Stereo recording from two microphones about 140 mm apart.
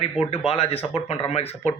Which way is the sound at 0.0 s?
45° left (ahead or behind).